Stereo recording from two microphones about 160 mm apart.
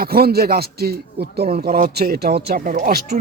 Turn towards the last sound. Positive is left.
turn(degrees=-70)  # may be behind; listen again after turning